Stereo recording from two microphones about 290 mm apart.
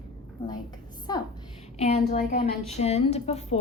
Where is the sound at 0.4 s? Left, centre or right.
Centre.